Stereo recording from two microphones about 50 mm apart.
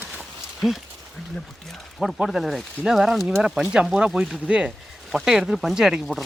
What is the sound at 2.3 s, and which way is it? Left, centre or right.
Speech, centre.